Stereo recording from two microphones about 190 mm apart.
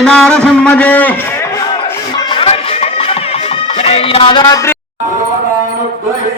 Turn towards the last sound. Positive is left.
turn(degrees=20)  # may be behind; listen again after turning